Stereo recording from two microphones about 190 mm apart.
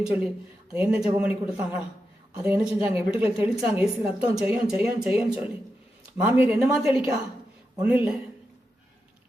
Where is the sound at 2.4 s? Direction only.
10° right (ahead or behind).